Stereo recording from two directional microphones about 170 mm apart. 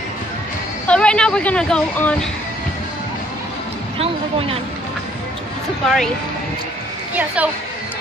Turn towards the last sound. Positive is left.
turn(degrees=-10)  # may be behind; listen again after turning